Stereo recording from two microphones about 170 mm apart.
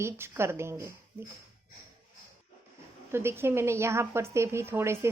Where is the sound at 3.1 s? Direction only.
15° right (ahead or behind).